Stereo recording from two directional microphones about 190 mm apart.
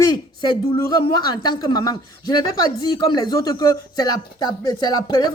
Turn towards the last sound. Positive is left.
turn(degrees=20)  # may be behind; listen again after turning